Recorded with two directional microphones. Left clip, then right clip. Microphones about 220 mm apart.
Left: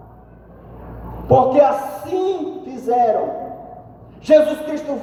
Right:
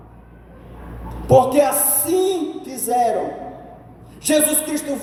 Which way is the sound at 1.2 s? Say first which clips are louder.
Left 1 dB; 50° right (ahead or behind).